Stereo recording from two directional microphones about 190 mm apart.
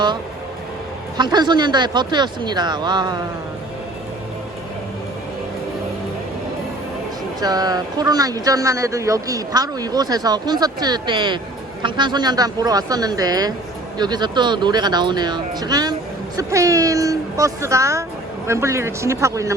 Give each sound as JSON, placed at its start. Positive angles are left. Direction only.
{"t": 1.1, "sound": "speech", "side_deg": -20}
{"t": 7.4, "sound": "speech", "side_deg": -20}